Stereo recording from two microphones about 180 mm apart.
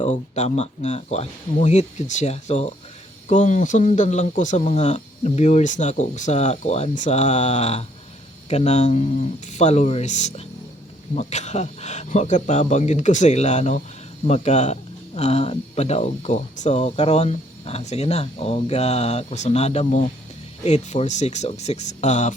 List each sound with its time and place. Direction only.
0.0 s speech: 40° left (ahead or behind)